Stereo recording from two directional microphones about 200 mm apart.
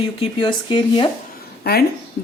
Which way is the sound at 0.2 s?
25° left (ahead or behind).